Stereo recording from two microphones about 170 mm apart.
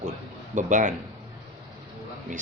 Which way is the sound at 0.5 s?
50° right (ahead or behind).